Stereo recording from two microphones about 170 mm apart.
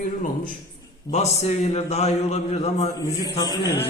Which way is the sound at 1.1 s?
40° left (ahead or behind).